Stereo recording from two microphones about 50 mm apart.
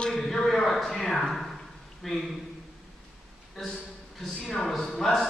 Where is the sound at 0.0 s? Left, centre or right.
Centre.